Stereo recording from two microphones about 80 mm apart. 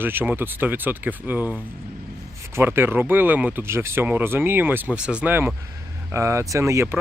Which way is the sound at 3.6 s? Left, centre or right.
Right.